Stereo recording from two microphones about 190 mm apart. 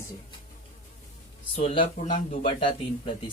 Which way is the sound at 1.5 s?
30° left (ahead or behind).